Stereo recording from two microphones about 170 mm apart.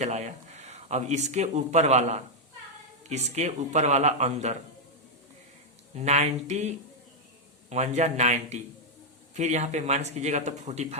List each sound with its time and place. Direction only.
0.0 s speech: 40° right (ahead or behind)
5.9 s speech: 40° right (ahead or behind)